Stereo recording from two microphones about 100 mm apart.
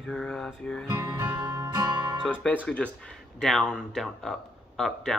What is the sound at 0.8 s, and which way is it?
Music, 40° right (ahead or behind).